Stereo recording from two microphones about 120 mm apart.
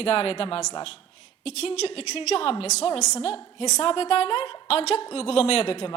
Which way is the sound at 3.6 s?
65° left (ahead or behind).